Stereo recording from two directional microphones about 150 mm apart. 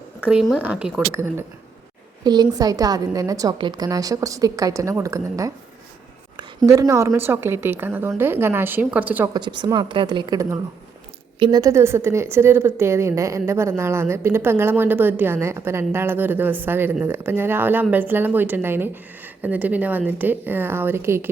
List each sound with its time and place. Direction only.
0.3 s speech: 5° right (ahead or behind)
1.1 s a woman's voice: 15° right (ahead or behind)
2.2 s a woman's voice: 25° right (ahead or behind)
6.7 s a woman's voice: 20° right (ahead or behind)
9.3 s a woman's voice: 30° right (ahead or behind)
11.3 s a woman's voice: 35° right (ahead or behind)
11.6 s a woman's voice: 20° right (ahead or behind)